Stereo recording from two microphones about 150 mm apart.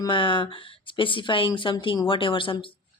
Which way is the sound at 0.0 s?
35° left (ahead or behind).